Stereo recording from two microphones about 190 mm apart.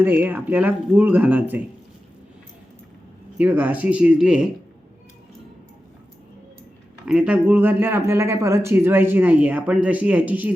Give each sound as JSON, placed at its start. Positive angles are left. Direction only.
{"t": 0.0, "sound": "speech", "side_deg": -10}
{"t": 3.3, "sound": "speech", "side_deg": -10}
{"t": 7.0, "sound": "speech", "side_deg": -5}